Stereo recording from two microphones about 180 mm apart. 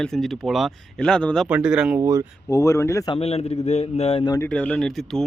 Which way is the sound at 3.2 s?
35° left (ahead or behind).